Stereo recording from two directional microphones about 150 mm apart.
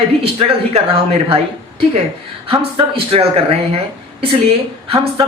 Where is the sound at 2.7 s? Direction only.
40° right (ahead or behind).